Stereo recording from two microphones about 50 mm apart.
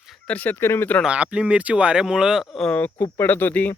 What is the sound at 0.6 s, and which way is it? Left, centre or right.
Speech, left.